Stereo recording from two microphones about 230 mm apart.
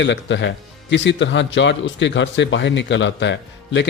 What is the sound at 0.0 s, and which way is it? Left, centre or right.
Speech, left.